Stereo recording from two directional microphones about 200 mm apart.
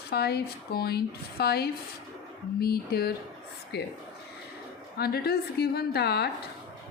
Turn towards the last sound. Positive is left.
turn(degrees=55)  # may be behind; listen again after turning